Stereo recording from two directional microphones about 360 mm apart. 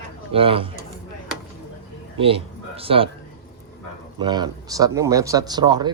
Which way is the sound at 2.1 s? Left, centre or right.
Centre.